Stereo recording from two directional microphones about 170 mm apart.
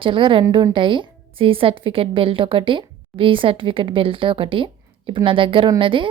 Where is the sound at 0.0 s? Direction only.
30° right (ahead or behind).